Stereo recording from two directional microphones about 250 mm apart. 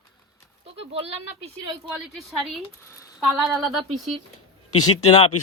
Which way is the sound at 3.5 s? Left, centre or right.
Centre.